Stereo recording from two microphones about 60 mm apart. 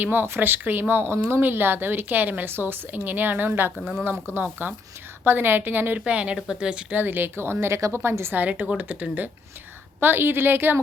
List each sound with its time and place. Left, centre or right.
0.0 s a woman's voice: right
6.1 s speech: centre
6.9 s speech: right
7.8 s a woman's voice: right
8.0 s speech: right
8.4 s a woman's voice: right